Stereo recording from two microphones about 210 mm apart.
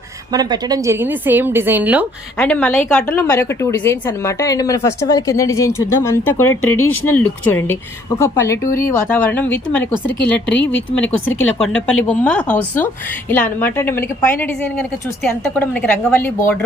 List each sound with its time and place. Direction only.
0.3 s a woman's voice: 20° right (ahead or behind)
2.4 s a woman's voice: 10° left (ahead or behind)
10.5 s speech: 60° left (ahead or behind)
11.3 s a woman's voice: 5° left (ahead or behind)